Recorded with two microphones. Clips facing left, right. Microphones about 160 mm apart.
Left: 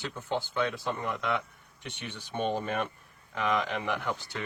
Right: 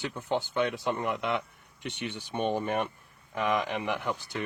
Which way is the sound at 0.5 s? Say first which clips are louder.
Right 2 dB; 20° right (ahead or behind).